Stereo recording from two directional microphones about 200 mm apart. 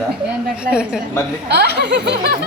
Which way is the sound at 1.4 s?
55° right (ahead or behind).